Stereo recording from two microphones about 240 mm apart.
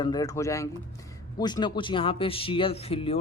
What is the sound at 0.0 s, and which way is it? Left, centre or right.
Speech, centre.